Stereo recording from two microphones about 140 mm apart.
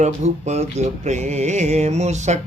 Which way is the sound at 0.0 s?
55° right (ahead or behind).